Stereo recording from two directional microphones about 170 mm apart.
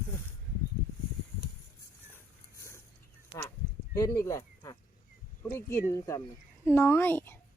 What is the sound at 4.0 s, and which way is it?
A woman's voice, 20° left (ahead or behind).